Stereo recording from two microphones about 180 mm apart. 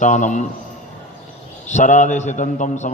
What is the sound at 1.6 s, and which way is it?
A man's voice, 40° left (ahead or behind).